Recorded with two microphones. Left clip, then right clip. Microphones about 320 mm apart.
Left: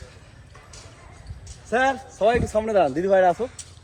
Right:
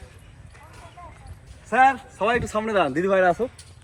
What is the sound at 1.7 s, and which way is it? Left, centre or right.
Speech, right.